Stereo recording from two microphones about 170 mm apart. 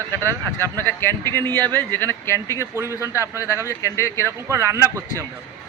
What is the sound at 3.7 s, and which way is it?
Speech, 15° left (ahead or behind).